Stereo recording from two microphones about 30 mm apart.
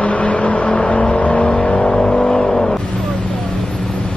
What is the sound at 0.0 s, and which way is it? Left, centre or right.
Vehicle, left.